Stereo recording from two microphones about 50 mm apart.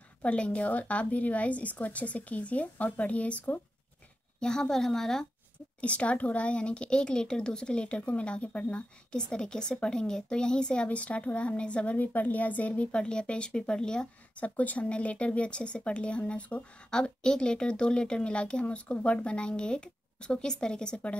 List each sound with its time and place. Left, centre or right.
0.2 s speech: left
4.4 s speech: centre
5.8 s speech: left
14.3 s speech: left
16.9 s speech: centre